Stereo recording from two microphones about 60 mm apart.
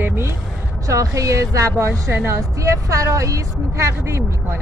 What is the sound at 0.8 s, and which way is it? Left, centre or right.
Speech, right.